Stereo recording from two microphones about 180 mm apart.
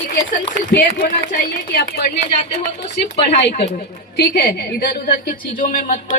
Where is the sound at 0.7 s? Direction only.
55° left (ahead or behind).